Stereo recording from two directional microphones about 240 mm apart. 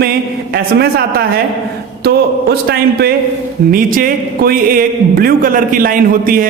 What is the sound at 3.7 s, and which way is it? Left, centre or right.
Speech, right.